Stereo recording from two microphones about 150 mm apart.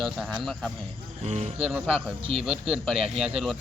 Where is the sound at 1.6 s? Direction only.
5° right (ahead or behind).